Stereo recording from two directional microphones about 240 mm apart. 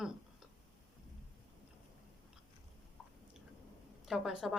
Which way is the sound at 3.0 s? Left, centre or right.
Centre.